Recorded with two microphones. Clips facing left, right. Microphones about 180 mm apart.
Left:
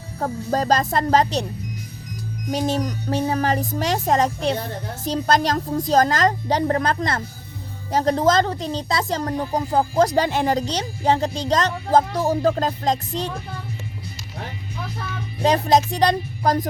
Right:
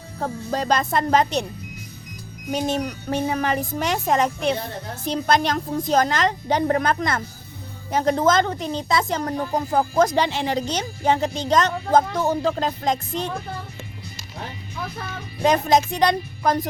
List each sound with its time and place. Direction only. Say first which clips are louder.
0.2 s a woman's voice: left 3 dB; 45° left (ahead or behind)
2.5 s a woman's voice: left 1 dB; 35° left (ahead or behind)
10.2 s a woman's voice: left 3 dB; 50° left (ahead or behind)
15.4 s a woman's voice: left 1 dB; 35° left (ahead or behind)